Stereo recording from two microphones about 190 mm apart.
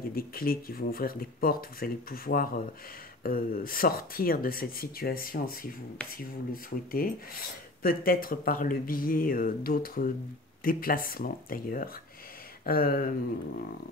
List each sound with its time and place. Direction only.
0.1 s speech: 50° left (ahead or behind)